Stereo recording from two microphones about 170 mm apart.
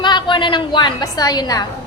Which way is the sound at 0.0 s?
25° left (ahead or behind).